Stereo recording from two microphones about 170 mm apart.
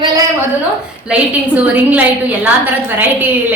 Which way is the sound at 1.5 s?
10° right (ahead or behind).